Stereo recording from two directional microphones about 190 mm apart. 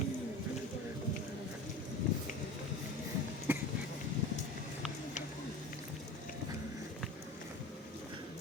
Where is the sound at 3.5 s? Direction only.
10° right (ahead or behind).